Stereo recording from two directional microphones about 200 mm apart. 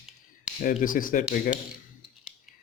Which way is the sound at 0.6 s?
40° left (ahead or behind).